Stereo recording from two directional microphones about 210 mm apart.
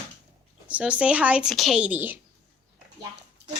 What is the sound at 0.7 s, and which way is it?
Speech, 5° right (ahead or behind).